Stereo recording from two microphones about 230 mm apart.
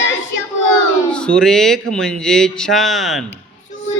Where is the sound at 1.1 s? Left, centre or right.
Centre.